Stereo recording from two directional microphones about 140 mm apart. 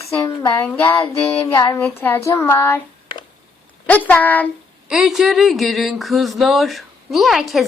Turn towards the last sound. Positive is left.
turn(degrees=0)  # may be behind; listen again after turning